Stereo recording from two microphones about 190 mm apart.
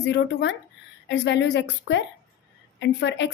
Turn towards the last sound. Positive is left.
turn(degrees=70)  # may be behind; listen again after turning